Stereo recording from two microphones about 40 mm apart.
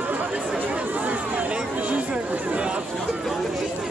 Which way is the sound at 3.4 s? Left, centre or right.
Centre.